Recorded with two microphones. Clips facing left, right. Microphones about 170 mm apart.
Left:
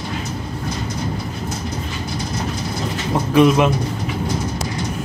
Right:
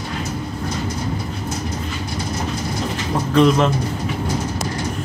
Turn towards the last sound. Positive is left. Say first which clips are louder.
# left 1 dB
turn(degrees=10)  # may be behind; listen again after turning